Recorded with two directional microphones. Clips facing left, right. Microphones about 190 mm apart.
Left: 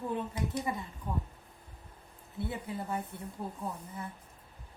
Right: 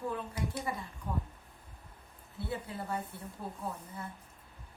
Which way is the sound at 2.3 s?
20° left (ahead or behind).